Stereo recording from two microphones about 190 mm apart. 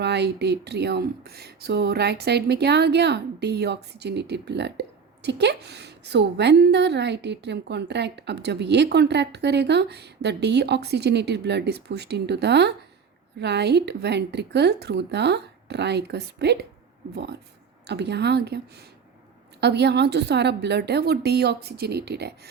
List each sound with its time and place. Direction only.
0.0 s speech: 60° right (ahead or behind)
17.8 s speech: 60° right (ahead or behind)